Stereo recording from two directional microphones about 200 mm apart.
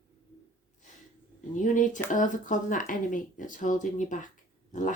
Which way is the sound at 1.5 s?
40° left (ahead or behind).